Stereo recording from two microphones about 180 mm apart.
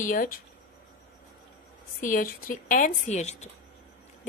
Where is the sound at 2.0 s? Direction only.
50° left (ahead or behind).